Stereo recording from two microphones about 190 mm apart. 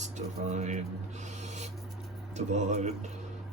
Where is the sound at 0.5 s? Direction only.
35° right (ahead or behind).